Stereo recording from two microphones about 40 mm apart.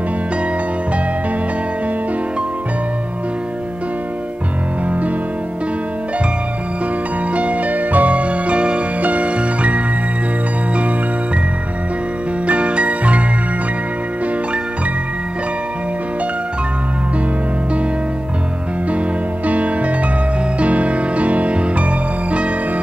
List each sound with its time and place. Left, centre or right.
7.3 s music: right
12.4 s music: right
19.4 s music: right